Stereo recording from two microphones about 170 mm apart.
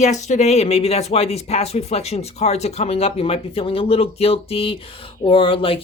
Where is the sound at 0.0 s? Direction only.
40° left (ahead or behind).